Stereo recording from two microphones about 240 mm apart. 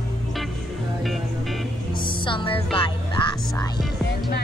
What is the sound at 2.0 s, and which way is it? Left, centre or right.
Music, left.